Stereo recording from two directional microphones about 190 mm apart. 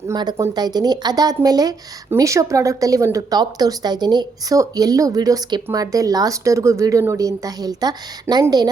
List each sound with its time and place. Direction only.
0.1 s speech: 20° right (ahead or behind)